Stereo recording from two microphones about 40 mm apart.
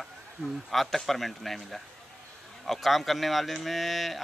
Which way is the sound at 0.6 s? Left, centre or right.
Centre.